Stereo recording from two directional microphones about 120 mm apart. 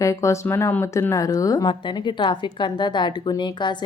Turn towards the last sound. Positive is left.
turn(degrees=40)  # may be behind; listen again after turning